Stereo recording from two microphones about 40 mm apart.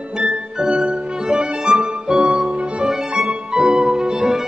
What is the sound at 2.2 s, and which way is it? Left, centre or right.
Music, centre.